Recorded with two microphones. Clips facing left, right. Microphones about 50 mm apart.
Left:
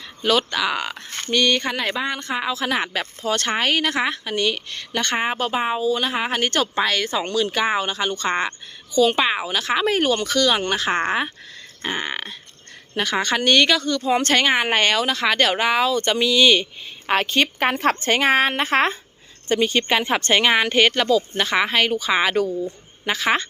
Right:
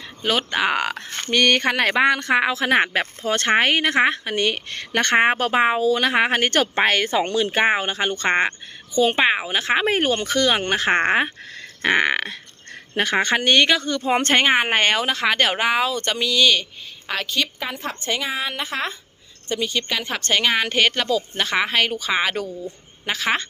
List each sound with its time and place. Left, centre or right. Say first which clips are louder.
0.2 s speech: left 3 dB; centre
0.5 s speech: right 2 dB; right
0.8 s a sound: right 4 dB; right
1.3 s a woman's voice: right 2 dB; right
11.8 s a sound: right 8 dB; right
12.9 s speech: right 2 dB; right
13.4 s speech: left 3 dB; centre
13.8 s speech: left 1 dB; right; by 16.0 s centre
16.0 s speech: left 3 dB; centre
17.1 s a woman's voice: left 5 dB; left
17.6 s a woman's voice: left 9 dB; left
20.0 s speech: left 1 dB; left; by 23.5 s centre